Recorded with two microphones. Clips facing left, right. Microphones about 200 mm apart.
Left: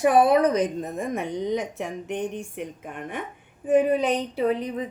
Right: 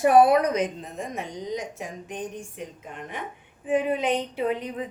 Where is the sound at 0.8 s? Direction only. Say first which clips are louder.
Left 6 dB; 55° left (ahead or behind).